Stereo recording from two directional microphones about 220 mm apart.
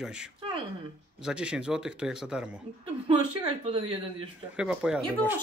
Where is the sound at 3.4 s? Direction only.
25° right (ahead or behind).